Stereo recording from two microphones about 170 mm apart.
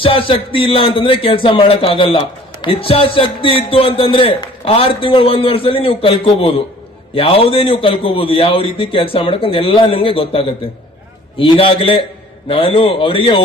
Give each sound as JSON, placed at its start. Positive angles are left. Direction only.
{"t": 0.0, "sound": "a man's voice", "side_deg": 30}